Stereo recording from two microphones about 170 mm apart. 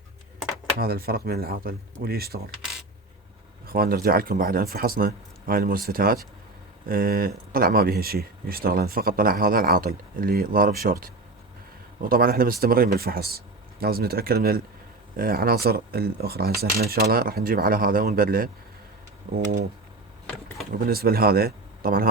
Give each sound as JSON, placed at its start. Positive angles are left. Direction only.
{"t": 0.8, "sound": "speech", "side_deg": -65}
{"t": 3.7, "sound": "speech", "side_deg": -60}
{"t": 19.3, "sound": "speech", "side_deg": -45}
{"t": 20.7, "sound": "speech", "side_deg": -65}